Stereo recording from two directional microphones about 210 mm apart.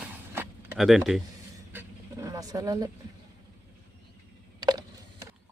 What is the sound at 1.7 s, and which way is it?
Dog, 15° right (ahead or behind).